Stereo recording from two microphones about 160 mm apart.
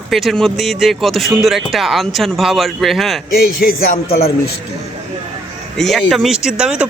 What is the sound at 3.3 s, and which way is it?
Speech, 65° left (ahead or behind).